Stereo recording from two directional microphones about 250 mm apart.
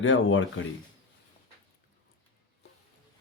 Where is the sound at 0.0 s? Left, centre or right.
Left.